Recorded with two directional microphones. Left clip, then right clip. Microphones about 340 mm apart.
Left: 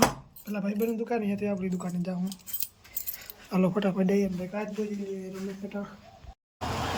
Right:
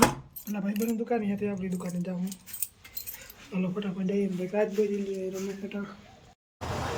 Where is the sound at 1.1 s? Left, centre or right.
Centre.